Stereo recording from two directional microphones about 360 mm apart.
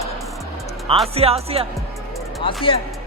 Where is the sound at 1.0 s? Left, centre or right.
Centre.